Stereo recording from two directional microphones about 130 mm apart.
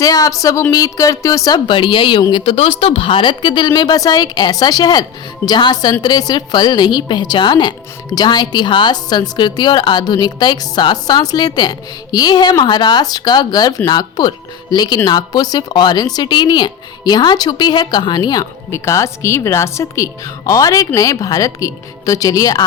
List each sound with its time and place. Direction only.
0.0 s a woman's voice: 25° left (ahead or behind)